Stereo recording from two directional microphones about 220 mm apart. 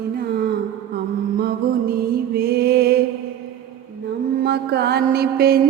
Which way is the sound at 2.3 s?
45° right (ahead or behind).